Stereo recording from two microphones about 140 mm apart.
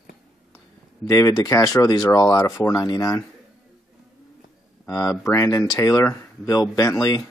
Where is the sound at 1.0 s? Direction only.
25° left (ahead or behind).